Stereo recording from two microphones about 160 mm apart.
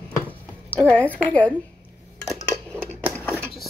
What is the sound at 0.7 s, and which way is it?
Speech, 5° left (ahead or behind).